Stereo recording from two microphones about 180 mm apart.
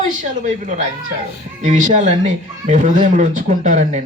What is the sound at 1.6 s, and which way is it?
Speech, 40° right (ahead or behind).